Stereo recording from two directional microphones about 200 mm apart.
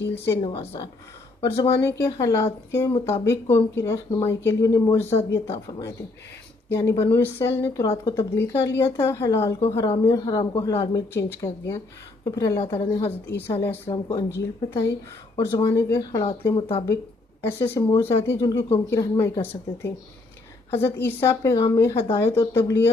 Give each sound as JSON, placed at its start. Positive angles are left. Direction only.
{"t": 0.4, "sound": "speech", "side_deg": 25}
{"t": 15.3, "sound": "speech", "side_deg": 20}
{"t": 16.8, "sound": "speech", "side_deg": 15}